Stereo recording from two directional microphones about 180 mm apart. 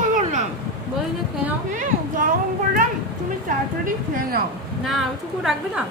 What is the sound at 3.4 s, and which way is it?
Speech, 50° right (ahead or behind).